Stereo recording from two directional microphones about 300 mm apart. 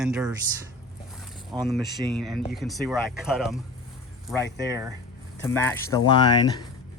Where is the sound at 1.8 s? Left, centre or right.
Centre.